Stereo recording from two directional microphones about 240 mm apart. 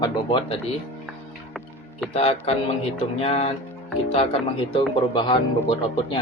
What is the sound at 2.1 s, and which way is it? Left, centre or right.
Speech, left.